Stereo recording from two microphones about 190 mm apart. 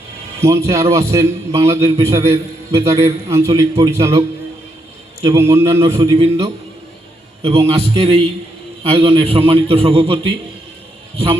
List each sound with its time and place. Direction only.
0.3 s a man's voice: 15° right (ahead or behind)
5.2 s a man's voice: 15° right (ahead or behind)
7.7 s a man's voice: 30° right (ahead or behind)